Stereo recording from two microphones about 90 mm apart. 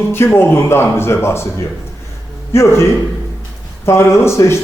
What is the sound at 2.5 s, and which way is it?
Speech, 30° left (ahead or behind).